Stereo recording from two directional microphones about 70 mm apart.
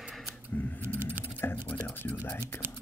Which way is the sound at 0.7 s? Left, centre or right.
Right.